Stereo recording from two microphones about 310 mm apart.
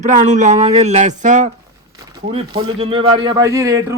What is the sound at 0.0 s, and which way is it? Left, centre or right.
A man's voice, right.